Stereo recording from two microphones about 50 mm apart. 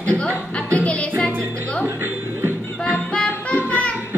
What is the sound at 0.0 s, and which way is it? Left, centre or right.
Music, left.